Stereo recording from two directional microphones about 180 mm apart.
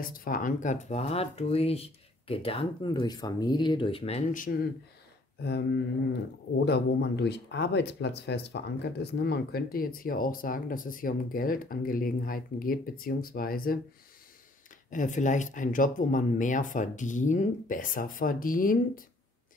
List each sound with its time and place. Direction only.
0.0 s speech: 50° left (ahead or behind); by 4.2 s 30° left (ahead or behind)
4.3 s speech: 50° left (ahead or behind)
6.6 s speech: 70° left (ahead or behind)
14.9 s speech: 45° left (ahead or behind)